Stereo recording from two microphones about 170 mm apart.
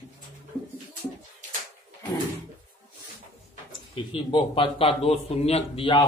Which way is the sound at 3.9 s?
30° left (ahead or behind).